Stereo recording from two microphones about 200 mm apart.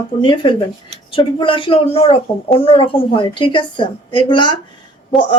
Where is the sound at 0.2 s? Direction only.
25° left (ahead or behind).